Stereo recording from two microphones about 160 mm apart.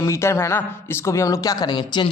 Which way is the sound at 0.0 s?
15° left (ahead or behind).